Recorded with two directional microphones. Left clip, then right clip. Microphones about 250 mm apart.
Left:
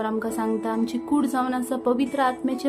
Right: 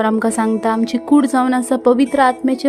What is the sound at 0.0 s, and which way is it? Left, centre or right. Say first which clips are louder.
A woman's voice: right 10 dB; right.